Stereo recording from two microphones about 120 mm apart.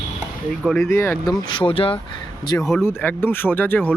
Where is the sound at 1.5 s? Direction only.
45° left (ahead or behind).